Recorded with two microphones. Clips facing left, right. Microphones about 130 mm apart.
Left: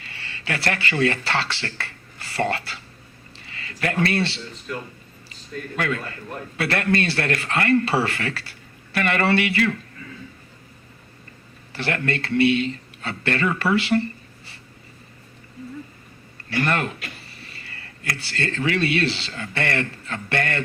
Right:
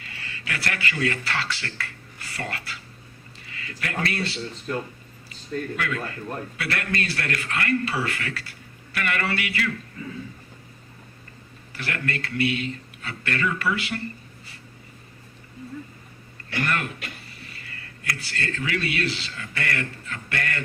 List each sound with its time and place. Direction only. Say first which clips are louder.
0.0 s speech: left 2 dB; 30° left (ahead or behind)
4.7 s speech: right 3 dB; 40° right (ahead or behind)
5.7 s speech: left 3 dB; 30° left (ahead or behind)
11.7 s speech: left 5 dB; 30° left (ahead or behind)
16.5 s speech: left 4 dB; 30° left (ahead or behind)